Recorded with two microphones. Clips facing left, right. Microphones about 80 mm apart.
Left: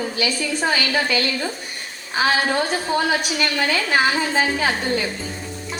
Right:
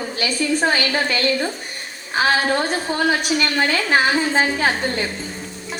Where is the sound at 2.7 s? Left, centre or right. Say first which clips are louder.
Even; right.